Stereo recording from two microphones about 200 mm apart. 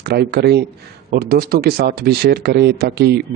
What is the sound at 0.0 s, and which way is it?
A man's voice, 55° right (ahead or behind).